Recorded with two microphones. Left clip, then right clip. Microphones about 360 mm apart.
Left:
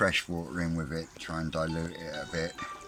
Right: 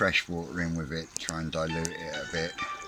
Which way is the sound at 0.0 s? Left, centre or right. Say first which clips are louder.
Right 1 dB; centre.